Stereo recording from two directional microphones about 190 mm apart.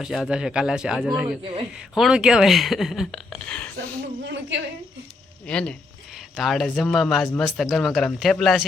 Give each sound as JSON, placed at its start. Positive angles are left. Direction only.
{"t": 0.0, "sound": "speech", "side_deg": 0}
{"t": 4.3, "sound": "a woman's voice", "side_deg": -75}
{"t": 5.5, "sound": "speech", "side_deg": 5}